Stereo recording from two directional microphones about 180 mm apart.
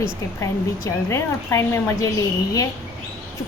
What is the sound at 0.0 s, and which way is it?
A woman's voice, 15° left (ahead or behind).